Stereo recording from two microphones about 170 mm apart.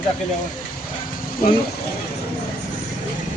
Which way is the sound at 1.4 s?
55° left (ahead or behind).